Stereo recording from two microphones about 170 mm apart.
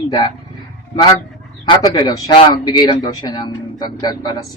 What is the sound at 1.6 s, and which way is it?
Speech, 25° left (ahead or behind).